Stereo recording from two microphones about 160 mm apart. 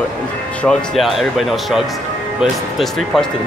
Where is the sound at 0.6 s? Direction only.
Centre (ahead or behind).